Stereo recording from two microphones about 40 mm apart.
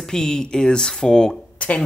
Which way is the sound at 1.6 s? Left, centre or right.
Left.